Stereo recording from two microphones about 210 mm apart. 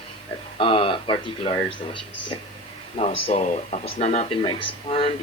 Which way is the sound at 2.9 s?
35° left (ahead or behind).